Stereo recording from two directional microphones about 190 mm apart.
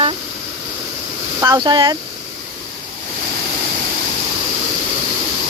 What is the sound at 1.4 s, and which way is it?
Speech, 20° right (ahead or behind).